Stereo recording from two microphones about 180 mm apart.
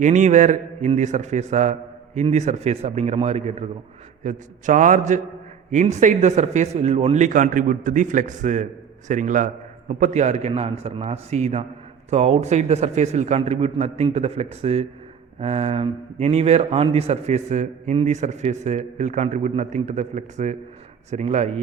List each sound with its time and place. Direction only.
0.0 s speech: 40° right (ahead or behind)